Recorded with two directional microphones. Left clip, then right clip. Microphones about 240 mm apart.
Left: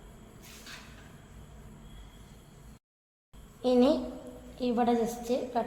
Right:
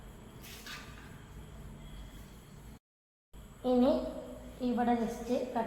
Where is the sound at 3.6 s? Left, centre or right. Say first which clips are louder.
Left 4 dB; left.